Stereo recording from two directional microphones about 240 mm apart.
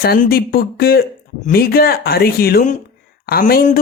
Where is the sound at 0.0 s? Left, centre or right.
Left.